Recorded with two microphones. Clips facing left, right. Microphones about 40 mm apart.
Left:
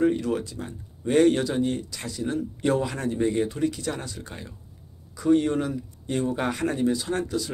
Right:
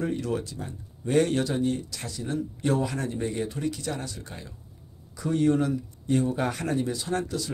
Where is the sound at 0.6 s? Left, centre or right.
Left.